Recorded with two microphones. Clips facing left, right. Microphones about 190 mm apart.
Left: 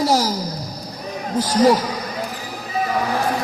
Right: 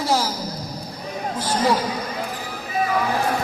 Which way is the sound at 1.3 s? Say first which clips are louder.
Left 6 dB; 40° left (ahead or behind).